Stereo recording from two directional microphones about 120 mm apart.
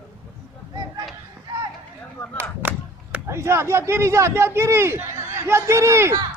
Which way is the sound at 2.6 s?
20° right (ahead or behind).